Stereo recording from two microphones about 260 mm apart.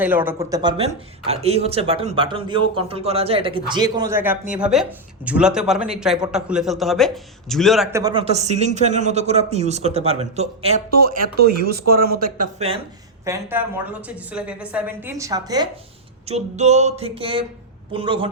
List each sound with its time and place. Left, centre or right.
0.0 s a man's voice: centre; by 10.8 s right
10.9 s speech: right
13.2 s speech: centre
16.2 s a man's voice: right